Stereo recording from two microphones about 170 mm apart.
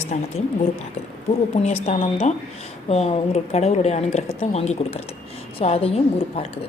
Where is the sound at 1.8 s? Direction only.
40° left (ahead or behind).